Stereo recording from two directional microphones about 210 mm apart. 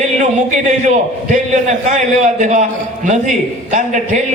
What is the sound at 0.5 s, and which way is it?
A man's voice, 35° right (ahead or behind).